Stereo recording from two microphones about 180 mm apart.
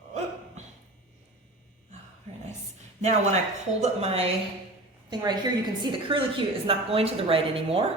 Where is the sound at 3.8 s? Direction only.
35° right (ahead or behind).